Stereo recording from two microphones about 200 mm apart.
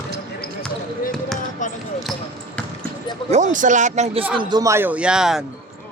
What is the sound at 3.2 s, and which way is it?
A man's voice, 35° right (ahead or behind).